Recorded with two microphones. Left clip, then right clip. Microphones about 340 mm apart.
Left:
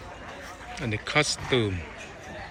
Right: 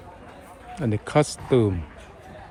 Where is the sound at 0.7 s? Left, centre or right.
Centre.